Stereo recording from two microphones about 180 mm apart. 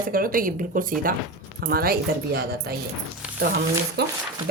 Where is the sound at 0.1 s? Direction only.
50° right (ahead or behind).